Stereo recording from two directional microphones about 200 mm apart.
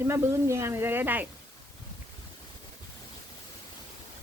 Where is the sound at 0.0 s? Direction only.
15° right (ahead or behind).